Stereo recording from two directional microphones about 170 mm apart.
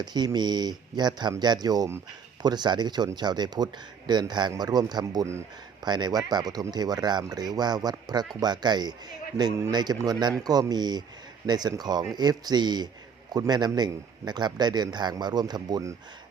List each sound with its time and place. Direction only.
0.0 s speech: 25° right (ahead or behind)